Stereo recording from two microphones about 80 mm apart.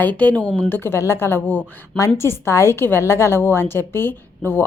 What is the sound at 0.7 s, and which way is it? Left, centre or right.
A woman's voice, left.